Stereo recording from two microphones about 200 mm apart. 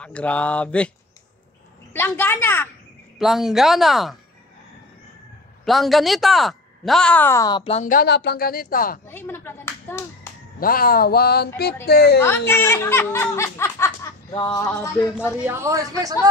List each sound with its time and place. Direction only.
0.0 s speech: 5° left (ahead or behind)
2.0 s speech: 10° left (ahead or behind)
3.2 s speech: centre (ahead or behind)
5.7 s speech: centre (ahead or behind); by 9.0 s 45° left (ahead or behind)
9.0 s speech: 10° left (ahead or behind)
10.6 s speech: 45° left (ahead or behind)
12.2 s speech: 10° left (ahead or behind)
15.4 s speech: 15° right (ahead or behind)